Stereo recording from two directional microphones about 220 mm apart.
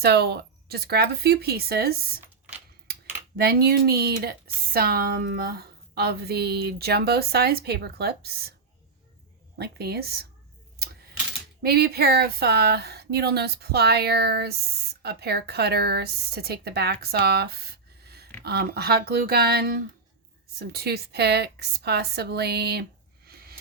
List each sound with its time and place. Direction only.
0.0 s speech: 45° right (ahead or behind)
3.3 s speech: 45° right (ahead or behind)
9.6 s speech: 45° right (ahead or behind)
11.6 s a woman's voice: 45° right (ahead or behind)